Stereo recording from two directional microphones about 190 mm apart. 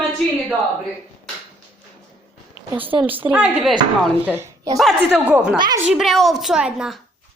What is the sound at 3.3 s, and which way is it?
A woman's voice, 5° right (ahead or behind).